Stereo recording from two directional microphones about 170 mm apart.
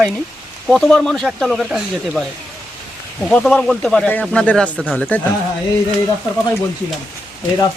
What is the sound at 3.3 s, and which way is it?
Speech, 5° left (ahead or behind).